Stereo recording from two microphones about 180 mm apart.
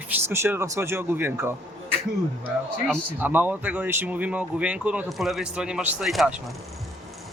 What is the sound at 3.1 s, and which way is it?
Speech, 10° right (ahead or behind).